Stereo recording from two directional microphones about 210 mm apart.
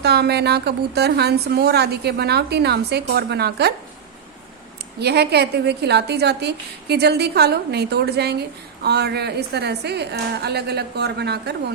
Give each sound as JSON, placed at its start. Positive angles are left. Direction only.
{"t": 0.0, "sound": "a woman's voice", "side_deg": -50}
{"t": 4.9, "sound": "a woman's voice", "side_deg": -50}